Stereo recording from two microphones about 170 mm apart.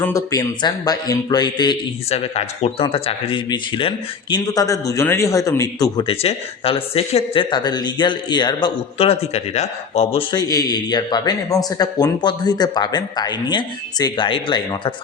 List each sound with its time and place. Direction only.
0.0 s speech: 20° left (ahead or behind)
2.0 s speech: 35° left (ahead or behind); by 5.9 s 20° left (ahead or behind)
6.0 s speech: 35° left (ahead or behind)
9.0 s speech: 40° left (ahead or behind)
10.3 s speech: 20° left (ahead or behind)